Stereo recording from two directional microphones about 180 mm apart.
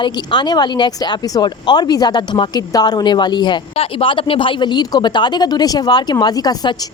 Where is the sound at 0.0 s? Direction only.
25° left (ahead or behind).